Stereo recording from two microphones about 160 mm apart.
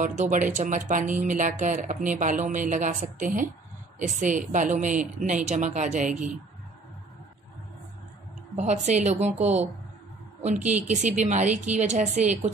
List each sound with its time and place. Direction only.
0.0 s speech: 50° right (ahead or behind)
8.5 s speech: 45° right (ahead or behind)